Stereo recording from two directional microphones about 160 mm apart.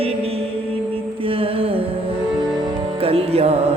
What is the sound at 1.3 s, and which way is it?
Music, 35° right (ahead or behind).